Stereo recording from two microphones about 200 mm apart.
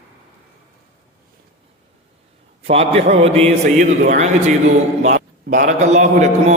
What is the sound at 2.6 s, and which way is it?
A man's voice, 30° right (ahead or behind).